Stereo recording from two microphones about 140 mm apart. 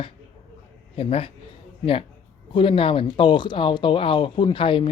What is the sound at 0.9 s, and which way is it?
A man's voice, 45° left (ahead or behind).